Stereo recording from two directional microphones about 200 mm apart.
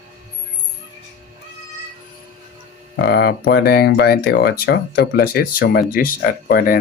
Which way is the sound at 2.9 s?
55° left (ahead or behind).